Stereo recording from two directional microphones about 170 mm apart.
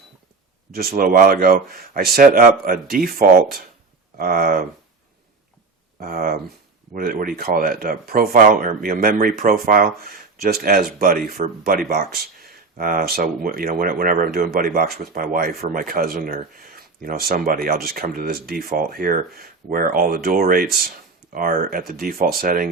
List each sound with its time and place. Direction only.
0.7 s speech: 60° right (ahead or behind)
6.0 s speech: 60° right (ahead or behind)